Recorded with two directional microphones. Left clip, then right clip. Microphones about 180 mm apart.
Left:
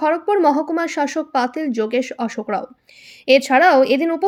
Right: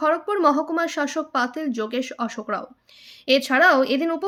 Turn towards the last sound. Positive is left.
turn(degrees=15)  # may be behind; listen again after turning